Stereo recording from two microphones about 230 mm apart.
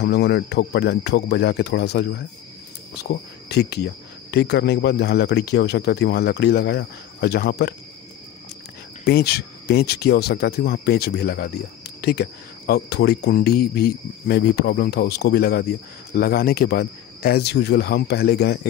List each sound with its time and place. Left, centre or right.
0.0 s cricket: left
9.0 s cricket: left